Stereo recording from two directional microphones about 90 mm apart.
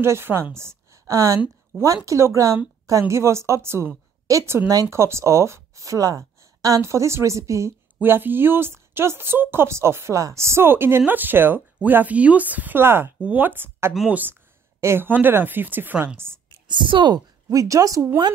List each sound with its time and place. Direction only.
0.0 s a woman's voice: 30° right (ahead or behind)
8.0 s speech: 20° right (ahead or behind)
16.6 s a woman's voice: 60° right (ahead or behind)
17.5 s speech: 40° right (ahead or behind)